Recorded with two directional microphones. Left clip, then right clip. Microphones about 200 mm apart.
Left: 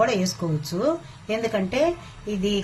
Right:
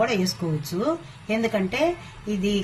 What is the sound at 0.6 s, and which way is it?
A woman's voice, 40° left (ahead or behind).